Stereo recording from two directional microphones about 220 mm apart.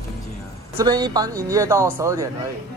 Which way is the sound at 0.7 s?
15° right (ahead or behind).